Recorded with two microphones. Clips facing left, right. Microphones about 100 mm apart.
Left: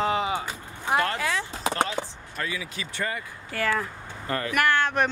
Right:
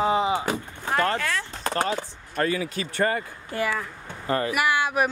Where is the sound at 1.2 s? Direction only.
5° left (ahead or behind).